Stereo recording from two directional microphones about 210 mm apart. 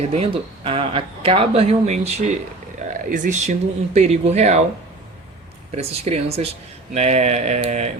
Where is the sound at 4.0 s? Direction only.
30° right (ahead or behind).